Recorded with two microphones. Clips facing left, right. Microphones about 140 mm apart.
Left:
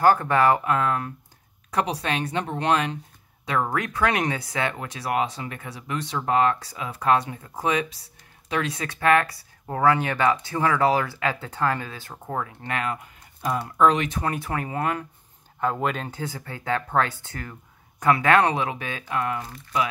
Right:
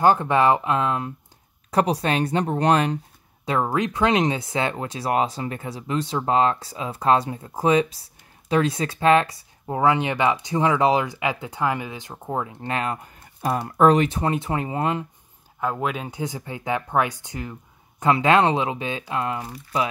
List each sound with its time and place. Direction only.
0.0 s speech: 20° right (ahead or behind)
1.7 s speech: 35° right (ahead or behind)
3.6 s speech: 20° right (ahead or behind); by 14.0 s 40° right (ahead or behind)
14.0 s speech: 25° right (ahead or behind)
15.6 s speech: 5° right (ahead or behind); by 19.4 s 25° right (ahead or behind)